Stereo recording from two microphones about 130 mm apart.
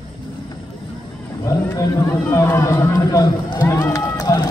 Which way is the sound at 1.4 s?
25° left (ahead or behind).